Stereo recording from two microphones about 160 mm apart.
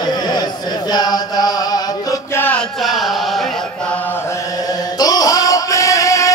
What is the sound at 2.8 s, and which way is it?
Chant, centre (ahead or behind).